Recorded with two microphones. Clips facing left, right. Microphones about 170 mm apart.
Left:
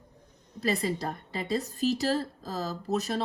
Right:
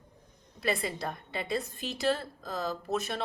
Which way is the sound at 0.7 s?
35° left (ahead or behind).